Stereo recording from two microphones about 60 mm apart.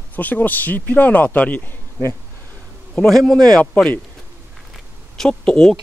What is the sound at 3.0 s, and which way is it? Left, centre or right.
Speech, centre.